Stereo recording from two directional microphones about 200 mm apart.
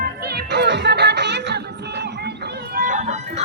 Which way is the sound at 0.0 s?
55° right (ahead or behind).